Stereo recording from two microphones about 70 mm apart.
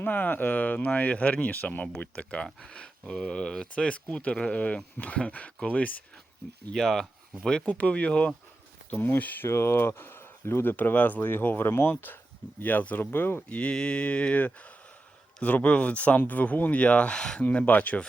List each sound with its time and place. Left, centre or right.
0.0 s speech: left
6.7 s speech: centre; by 9.5 s left
9.5 s speech: left
13.6 s speech: centre